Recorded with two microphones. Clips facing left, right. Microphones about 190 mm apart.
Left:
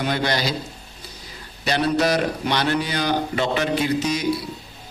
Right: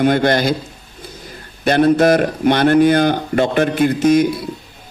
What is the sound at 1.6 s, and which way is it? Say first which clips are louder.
Speech: right 8 dB; 50° right (ahead or behind).